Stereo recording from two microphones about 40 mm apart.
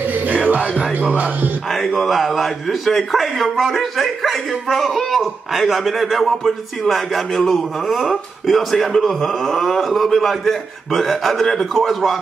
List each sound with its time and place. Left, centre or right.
0.0 s music: right
1.7 s a man's voice: centre